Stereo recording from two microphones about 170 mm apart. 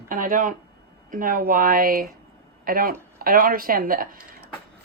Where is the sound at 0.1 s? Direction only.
50° right (ahead or behind).